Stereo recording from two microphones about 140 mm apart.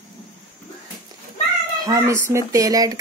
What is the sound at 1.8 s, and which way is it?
Speech, 25° right (ahead or behind).